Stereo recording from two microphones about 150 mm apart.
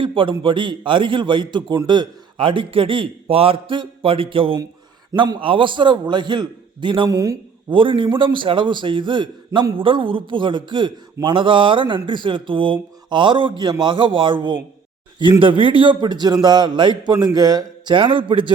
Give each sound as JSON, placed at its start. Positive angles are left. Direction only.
{"t": 0.0, "sound": "a man's voice", "side_deg": -35}
{"t": 7.7, "sound": "a man's voice", "side_deg": -35}